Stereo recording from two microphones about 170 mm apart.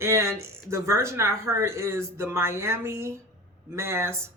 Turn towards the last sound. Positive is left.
turn(degrees=-15)  # may be behind; listen again after turning